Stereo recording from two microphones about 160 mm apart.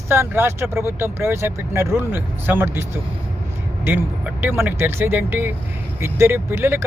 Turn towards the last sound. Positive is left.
turn(degrees=-15)  # may be behind; listen again after turning